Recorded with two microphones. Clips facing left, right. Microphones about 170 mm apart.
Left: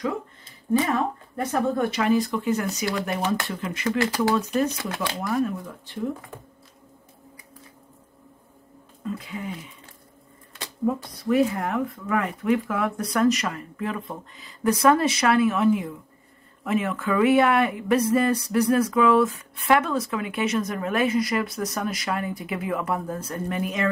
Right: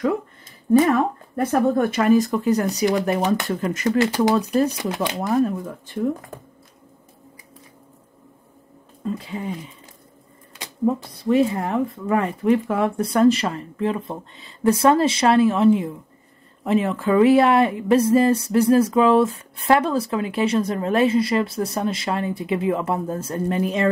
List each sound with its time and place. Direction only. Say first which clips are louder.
0.7 s speech: right 6 dB; 55° right (ahead or behind); by 4.6 s 35° right (ahead or behind)
4.6 s speech: right 4 dB; 15° right (ahead or behind)
9.0 s speech: right 4 dB; 30° right (ahead or behind)
10.6 s speech: right 4 dB; 25° right (ahead or behind)